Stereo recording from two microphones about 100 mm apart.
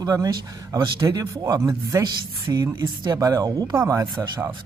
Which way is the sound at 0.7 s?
40° right (ahead or behind).